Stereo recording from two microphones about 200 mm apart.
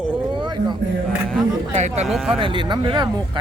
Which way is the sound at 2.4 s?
25° right (ahead or behind).